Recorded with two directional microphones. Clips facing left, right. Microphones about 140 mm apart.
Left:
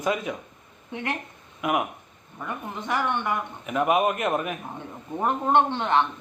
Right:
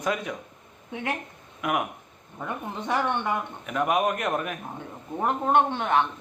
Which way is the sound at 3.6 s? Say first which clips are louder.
Left 2 dB; 5° left (ahead or behind).